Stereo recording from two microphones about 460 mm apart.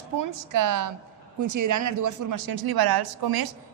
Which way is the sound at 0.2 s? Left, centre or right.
Right.